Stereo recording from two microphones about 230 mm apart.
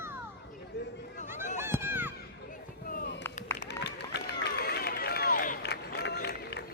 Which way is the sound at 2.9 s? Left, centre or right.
Left.